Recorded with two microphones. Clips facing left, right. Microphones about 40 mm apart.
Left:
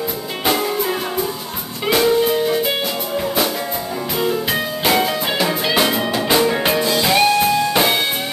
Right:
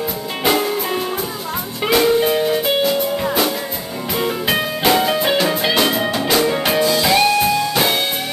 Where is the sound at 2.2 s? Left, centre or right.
Centre.